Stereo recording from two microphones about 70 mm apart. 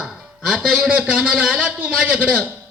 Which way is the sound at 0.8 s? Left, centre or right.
Centre.